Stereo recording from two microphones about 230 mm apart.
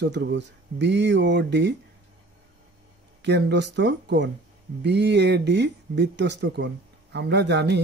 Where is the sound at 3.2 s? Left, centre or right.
Right.